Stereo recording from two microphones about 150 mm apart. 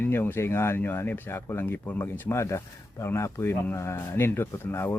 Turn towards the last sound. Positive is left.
turn(degrees=15)  # may be behind; listen again after turning